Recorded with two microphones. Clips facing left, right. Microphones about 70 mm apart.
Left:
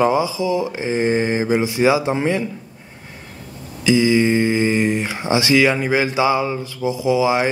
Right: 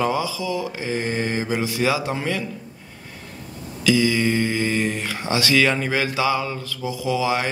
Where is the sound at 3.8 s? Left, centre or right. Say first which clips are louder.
Left 4 dB; left.